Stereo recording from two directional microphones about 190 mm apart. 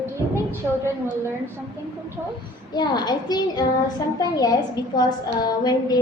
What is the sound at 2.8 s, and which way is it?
A child's voice, 25° left (ahead or behind).